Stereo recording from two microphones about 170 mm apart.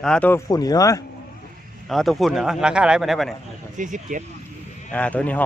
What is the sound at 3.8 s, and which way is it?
Speech, 50° right (ahead or behind).